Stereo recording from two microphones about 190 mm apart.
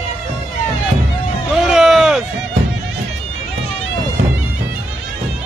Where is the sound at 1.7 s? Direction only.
Centre (ahead or behind).